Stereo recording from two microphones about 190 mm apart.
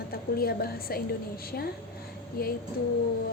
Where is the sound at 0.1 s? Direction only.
55° left (ahead or behind).